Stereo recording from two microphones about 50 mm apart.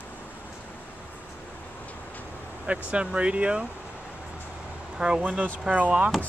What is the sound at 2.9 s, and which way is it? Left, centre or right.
Speech, right.